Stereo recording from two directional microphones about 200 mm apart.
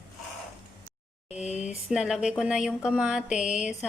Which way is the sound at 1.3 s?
35° left (ahead or behind).